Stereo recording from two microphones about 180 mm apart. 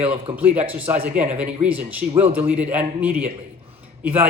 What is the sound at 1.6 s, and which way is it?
Speech, 10° right (ahead or behind).